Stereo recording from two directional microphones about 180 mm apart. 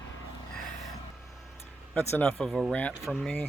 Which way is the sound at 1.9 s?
10° left (ahead or behind).